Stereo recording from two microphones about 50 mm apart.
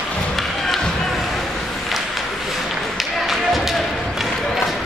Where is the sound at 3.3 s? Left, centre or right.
Centre.